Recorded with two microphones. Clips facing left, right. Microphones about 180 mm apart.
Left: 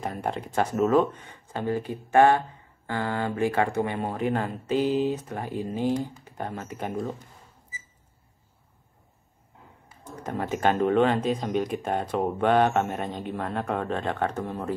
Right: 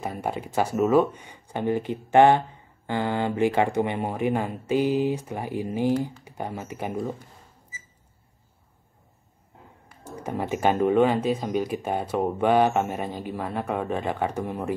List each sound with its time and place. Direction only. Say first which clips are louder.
0.0 s speech: right 1 dB; 5° right (ahead or behind)
10.0 s speech: right 1 dB; 10° right (ahead or behind)